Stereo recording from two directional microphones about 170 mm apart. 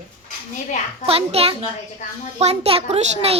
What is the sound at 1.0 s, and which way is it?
A child's voice, 35° right (ahead or behind).